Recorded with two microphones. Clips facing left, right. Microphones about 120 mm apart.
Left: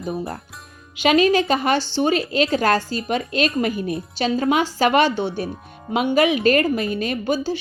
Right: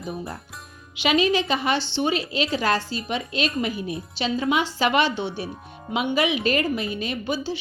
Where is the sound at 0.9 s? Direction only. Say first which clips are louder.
Left 5 dB; 45° left (ahead or behind).